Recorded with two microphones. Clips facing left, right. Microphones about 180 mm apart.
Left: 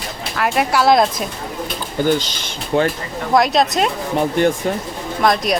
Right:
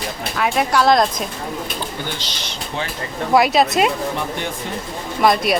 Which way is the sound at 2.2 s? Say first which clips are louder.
Left 4 dB; 45° left (ahead or behind).